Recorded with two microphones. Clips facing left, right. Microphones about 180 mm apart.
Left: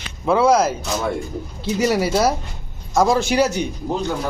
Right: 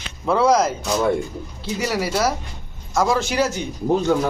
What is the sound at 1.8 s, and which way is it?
Speech, 20° left (ahead or behind).